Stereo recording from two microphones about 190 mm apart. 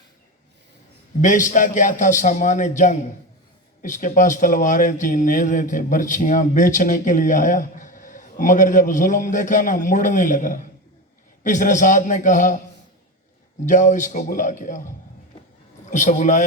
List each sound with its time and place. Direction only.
1.2 s a man's voice: 40° left (ahead or behind)
13.7 s a man's voice: 40° left (ahead or behind)